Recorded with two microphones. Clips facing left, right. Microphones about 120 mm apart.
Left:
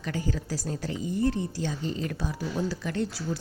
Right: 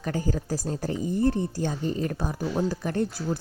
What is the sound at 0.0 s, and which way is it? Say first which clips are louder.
A woman's voice: right 3 dB; 45° right (ahead or behind).